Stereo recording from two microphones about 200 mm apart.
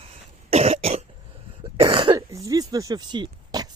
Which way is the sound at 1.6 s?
25° right (ahead or behind).